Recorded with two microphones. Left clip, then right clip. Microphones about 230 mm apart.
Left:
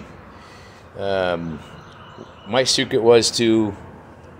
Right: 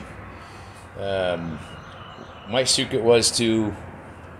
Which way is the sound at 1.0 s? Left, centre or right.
Centre.